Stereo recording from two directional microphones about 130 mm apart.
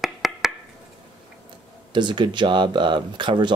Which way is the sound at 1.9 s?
35° right (ahead or behind).